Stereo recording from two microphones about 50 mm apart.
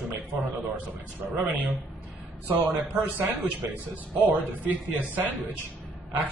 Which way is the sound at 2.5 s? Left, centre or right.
Right.